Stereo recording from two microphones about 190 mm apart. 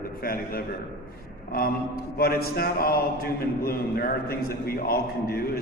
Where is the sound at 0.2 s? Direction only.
50° left (ahead or behind).